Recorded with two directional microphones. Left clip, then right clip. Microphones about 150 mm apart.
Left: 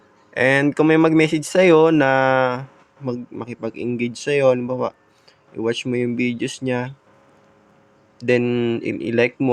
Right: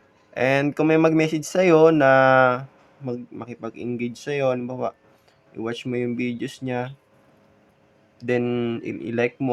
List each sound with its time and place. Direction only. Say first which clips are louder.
0.3 s speech: left 4 dB; 25° left (ahead or behind)
8.2 s speech: left 5 dB; 25° left (ahead or behind)